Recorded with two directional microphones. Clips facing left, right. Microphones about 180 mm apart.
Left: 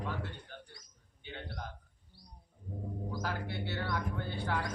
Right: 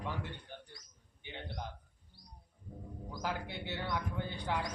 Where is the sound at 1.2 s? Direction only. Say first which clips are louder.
Even; 15° right (ahead or behind).